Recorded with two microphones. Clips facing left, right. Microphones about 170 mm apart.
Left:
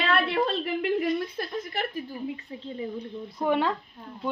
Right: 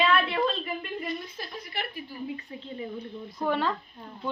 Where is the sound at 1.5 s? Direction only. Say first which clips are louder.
Left 5 dB; 45° left (ahead or behind).